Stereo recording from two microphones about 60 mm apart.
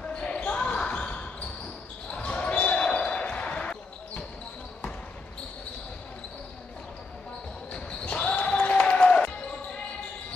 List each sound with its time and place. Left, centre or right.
0.0 s basketball bounce: centre
7.7 s basketball bounce: centre